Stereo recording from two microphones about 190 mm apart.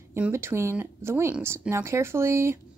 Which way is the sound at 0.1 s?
15° right (ahead or behind).